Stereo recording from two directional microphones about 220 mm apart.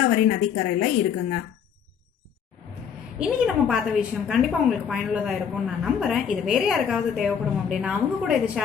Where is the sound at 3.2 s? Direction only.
5° right (ahead or behind).